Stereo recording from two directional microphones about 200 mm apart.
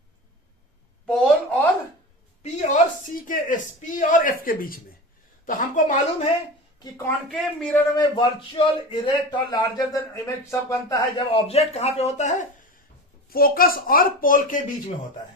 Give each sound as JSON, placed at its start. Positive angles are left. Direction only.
{"t": 1.0, "sound": "a sound", "side_deg": 5}
{"t": 2.4, "sound": "a sound", "side_deg": 35}
{"t": 5.5, "sound": "speech", "side_deg": 40}
{"t": 6.9, "sound": "a man's voice", "side_deg": 10}
{"t": 7.9, "sound": "speech", "side_deg": 20}
{"t": 11.3, "sound": "speech", "side_deg": 30}
{"t": 13.3, "sound": "a child's voice", "side_deg": 45}